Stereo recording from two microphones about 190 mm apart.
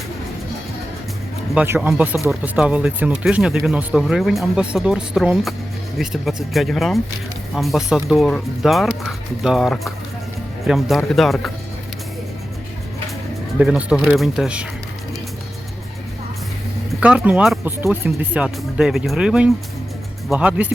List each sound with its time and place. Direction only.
1.5 s speech: 10° right (ahead or behind)
13.6 s speech: 5° right (ahead or behind)
17.0 s speech: 5° right (ahead or behind)